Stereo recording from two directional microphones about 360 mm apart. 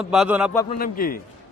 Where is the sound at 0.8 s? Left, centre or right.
Left.